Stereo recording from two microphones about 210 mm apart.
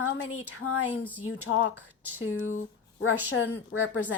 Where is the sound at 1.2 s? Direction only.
75° left (ahead or behind).